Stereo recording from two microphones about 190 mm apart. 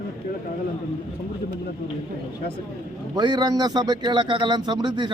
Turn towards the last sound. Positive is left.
turn(degrees=-25)  # may be behind; listen again after turning